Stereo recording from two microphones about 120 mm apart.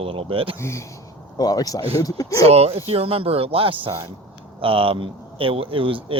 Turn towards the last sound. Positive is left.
turn(degrees=-50)  # may be behind; listen again after turning